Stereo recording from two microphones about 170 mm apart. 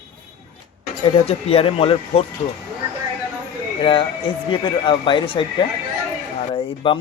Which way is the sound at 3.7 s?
30° left (ahead or behind).